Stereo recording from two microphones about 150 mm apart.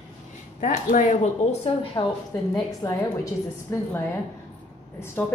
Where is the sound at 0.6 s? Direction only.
65° left (ahead or behind).